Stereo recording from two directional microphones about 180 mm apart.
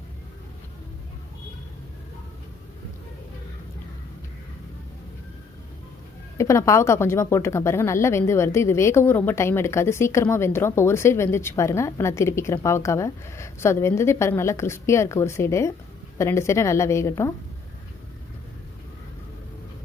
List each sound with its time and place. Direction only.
6.3 s speech: 15° left (ahead or behind)